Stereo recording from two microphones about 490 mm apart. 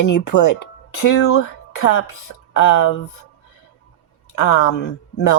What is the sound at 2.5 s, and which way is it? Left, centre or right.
Speech, left.